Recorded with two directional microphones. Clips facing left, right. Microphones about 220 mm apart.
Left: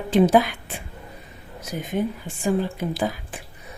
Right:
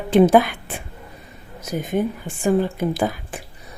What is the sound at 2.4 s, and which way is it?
Speech, 50° right (ahead or behind).